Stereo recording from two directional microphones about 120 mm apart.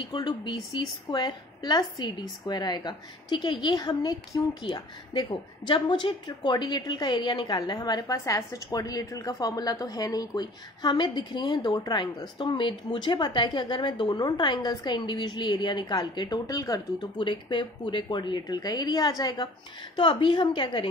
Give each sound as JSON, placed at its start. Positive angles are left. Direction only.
{"t": 0.1, "sound": "a woman's voice", "side_deg": 40}
{"t": 17.3, "sound": "a woman's voice", "side_deg": 40}